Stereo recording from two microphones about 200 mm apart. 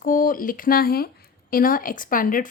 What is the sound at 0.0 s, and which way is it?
Speech, 45° left (ahead or behind).